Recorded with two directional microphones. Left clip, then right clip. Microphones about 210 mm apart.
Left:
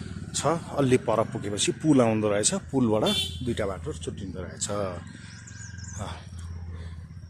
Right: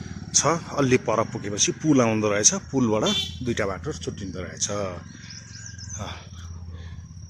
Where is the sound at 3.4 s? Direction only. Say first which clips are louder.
Right 3 dB; 15° right (ahead or behind).